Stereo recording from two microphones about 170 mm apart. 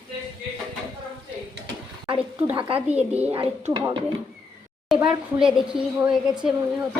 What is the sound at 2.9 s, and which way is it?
Speech, 10° right (ahead or behind).